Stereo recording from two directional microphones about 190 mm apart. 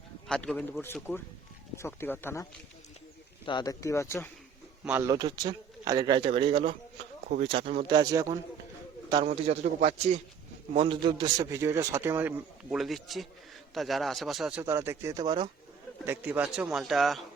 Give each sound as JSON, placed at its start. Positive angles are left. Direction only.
{"t": 0.3, "sound": "a man's voice", "side_deg": 5}
{"t": 4.9, "sound": "a man's voice", "side_deg": -10}
{"t": 5.1, "sound": "speech", "side_deg": -20}
{"t": 9.2, "sound": "a man's voice", "side_deg": -35}
{"t": 12.7, "sound": "a man's voice", "side_deg": 0}
{"t": 14.6, "sound": "a man's voice", "side_deg": -15}
{"t": 16.0, "sound": "a man's voice", "side_deg": -10}